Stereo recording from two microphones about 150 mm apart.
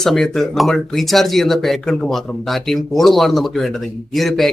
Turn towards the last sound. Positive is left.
turn(degrees=0)  # may be behind; listen again after turning